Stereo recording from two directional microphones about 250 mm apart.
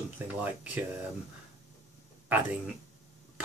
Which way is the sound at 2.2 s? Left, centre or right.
Centre.